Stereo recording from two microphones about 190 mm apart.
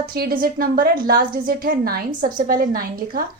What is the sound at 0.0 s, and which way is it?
A woman's voice, 50° right (ahead or behind).